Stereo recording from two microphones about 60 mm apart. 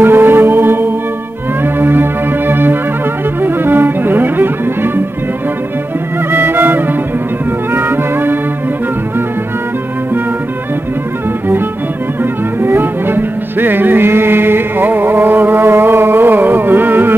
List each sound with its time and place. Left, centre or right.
0.0 s music: right
6.3 s music: right
12.2 s music: right